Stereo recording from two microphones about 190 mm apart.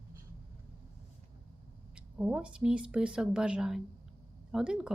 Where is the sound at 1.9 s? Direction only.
5° right (ahead or behind).